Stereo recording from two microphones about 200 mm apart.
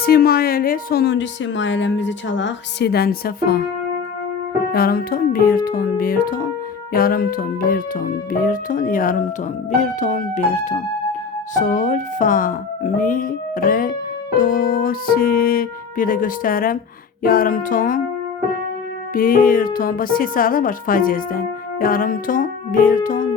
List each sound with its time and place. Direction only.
0.0 s speech: 50° left (ahead or behind)
4.7 s speech: 50° left (ahead or behind)
19.1 s speech: 45° left (ahead or behind)